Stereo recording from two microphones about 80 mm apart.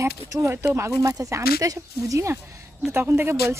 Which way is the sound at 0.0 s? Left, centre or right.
Right.